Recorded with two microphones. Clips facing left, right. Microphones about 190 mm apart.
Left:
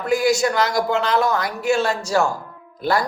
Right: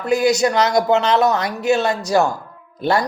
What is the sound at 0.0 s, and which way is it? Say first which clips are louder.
Speech: right 2 dB; 20° right (ahead or behind).